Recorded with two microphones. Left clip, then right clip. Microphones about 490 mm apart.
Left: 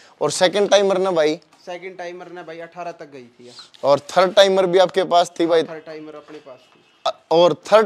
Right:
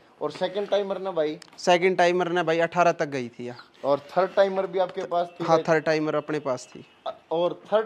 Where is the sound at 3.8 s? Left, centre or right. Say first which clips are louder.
Left 8 dB; left.